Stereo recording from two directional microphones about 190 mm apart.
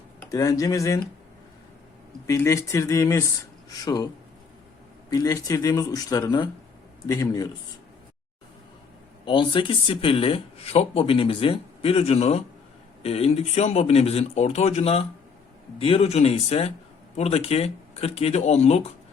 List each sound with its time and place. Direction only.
0.2 s speech: 15° left (ahead or behind)
2.2 s speech: 15° left (ahead or behind)
5.1 s speech: 20° left (ahead or behind)
9.2 s speech: 25° left (ahead or behind)